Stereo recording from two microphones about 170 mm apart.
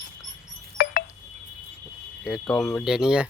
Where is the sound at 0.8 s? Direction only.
65° left (ahead or behind).